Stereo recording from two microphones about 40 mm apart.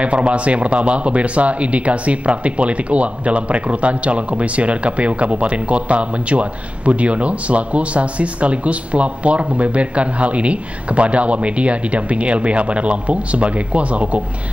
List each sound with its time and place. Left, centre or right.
0.0 s speech: right